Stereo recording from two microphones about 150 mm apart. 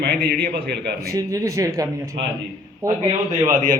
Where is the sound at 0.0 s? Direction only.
90° right.